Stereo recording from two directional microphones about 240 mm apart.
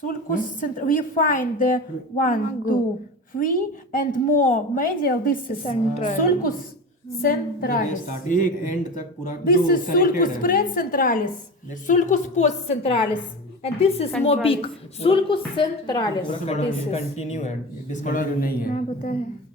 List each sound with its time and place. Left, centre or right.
0.3 s a woman's voice: left